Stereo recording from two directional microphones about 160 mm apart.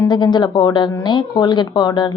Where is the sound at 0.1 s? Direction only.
30° left (ahead or behind).